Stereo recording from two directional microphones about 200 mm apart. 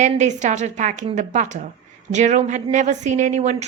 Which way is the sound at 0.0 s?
35° right (ahead or behind).